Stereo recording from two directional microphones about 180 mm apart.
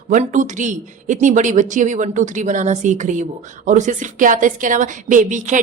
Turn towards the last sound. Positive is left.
turn(degrees=-45)  # may be behind; listen again after turning